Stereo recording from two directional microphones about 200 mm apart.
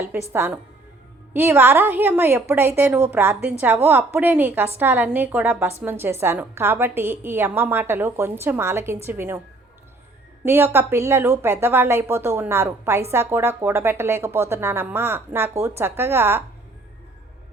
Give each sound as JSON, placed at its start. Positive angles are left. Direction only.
{"t": 0.0, "sound": "a woman's voice", "side_deg": -10}
{"t": 10.4, "sound": "a woman's voice", "side_deg": -10}